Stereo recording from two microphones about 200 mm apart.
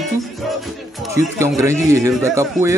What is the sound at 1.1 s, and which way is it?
A man's voice, 15° right (ahead or behind).